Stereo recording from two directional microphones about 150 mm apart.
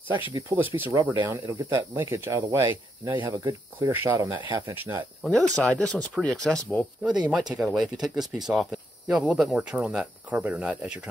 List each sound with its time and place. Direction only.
0.3 s speech: 20° right (ahead or behind)
5.6 s speech: 5° left (ahead or behind)
7.0 s speech: 5° right (ahead or behind)